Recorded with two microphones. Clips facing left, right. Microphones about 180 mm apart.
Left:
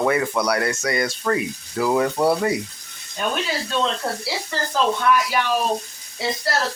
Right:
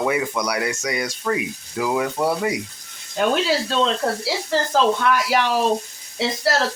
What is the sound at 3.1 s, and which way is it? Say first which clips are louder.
Speech: right 6 dB; 90° right.